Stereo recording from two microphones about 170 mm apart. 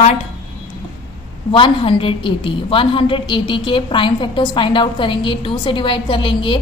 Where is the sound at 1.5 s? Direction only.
30° left (ahead or behind).